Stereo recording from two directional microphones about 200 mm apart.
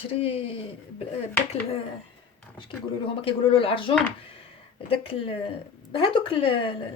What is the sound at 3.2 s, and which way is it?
A woman's voice, 25° left (ahead or behind).